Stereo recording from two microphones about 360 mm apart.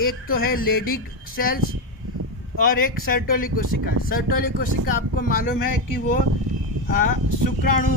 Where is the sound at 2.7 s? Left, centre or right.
Left.